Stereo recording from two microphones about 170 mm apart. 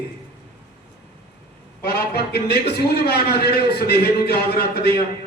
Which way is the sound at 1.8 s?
70° left (ahead or behind).